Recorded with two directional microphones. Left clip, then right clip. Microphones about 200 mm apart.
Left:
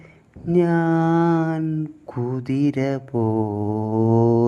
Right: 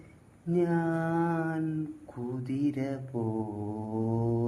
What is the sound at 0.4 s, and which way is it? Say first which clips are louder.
Mantra: left 10 dB; 40° left (ahead or behind).